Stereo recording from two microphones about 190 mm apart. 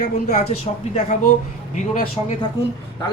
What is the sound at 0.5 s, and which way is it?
A man's voice, 35° left (ahead or behind).